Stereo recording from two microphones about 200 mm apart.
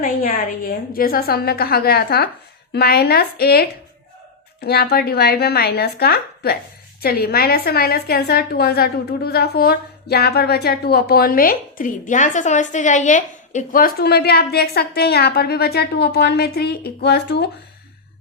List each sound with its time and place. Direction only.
0.0 s a woman's voice: 45° left (ahead or behind)